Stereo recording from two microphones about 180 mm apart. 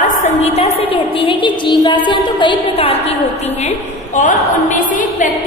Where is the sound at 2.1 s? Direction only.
25° left (ahead or behind).